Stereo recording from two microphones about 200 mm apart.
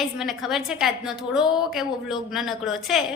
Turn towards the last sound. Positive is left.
turn(degrees=0)  # may be behind; listen again after turning